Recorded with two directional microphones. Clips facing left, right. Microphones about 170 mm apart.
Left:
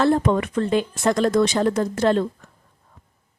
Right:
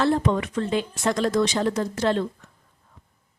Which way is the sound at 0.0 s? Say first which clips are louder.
Left 3 dB; 50° left (ahead or behind).